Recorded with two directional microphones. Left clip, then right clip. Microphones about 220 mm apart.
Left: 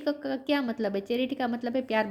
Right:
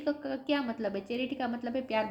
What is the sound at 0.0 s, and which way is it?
A woman's voice, 45° left (ahead or behind).